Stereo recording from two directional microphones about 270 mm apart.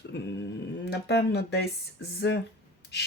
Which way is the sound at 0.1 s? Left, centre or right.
Left.